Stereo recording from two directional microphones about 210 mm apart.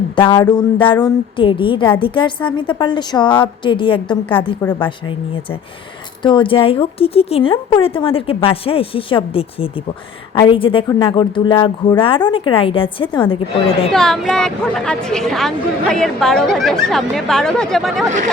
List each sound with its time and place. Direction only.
0.2 s speech: 20° left (ahead or behind)
6.2 s speech: 25° left (ahead or behind)
13.9 s a woman's voice: centre (ahead or behind)